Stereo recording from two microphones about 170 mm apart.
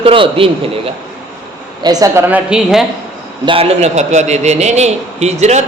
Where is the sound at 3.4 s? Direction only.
35° right (ahead or behind).